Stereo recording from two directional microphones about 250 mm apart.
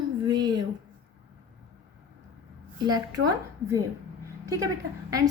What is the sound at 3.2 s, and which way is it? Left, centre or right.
Speech, right.